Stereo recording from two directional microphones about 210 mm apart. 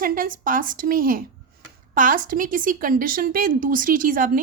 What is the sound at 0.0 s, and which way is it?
A woman's voice, 40° right (ahead or behind).